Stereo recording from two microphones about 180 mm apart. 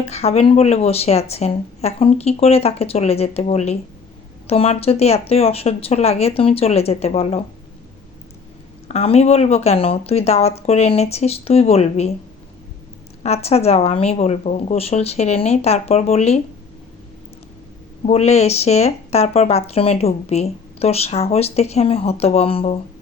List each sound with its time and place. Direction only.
0.0 s speech: 35° left (ahead or behind)
8.9 s speech: 35° left (ahead or behind)
13.2 s speech: 35° left (ahead or behind)
18.0 s speech: 35° left (ahead or behind)